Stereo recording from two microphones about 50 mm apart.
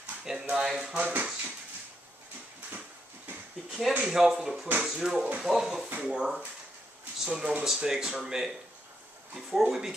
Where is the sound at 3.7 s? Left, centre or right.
Centre.